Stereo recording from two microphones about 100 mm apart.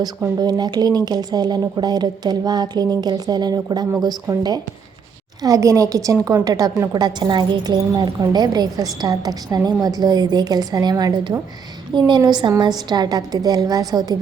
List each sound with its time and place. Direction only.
0.3 s a woman's voice: 45° right (ahead or behind)